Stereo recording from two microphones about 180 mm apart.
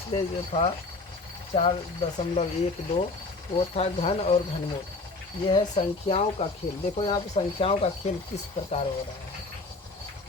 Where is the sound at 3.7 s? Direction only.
35° left (ahead or behind).